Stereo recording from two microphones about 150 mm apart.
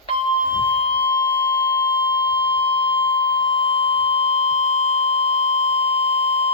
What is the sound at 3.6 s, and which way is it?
Beep, 40° left (ahead or behind).